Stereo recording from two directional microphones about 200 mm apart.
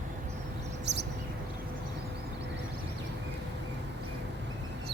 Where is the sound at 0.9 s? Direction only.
60° right (ahead or behind).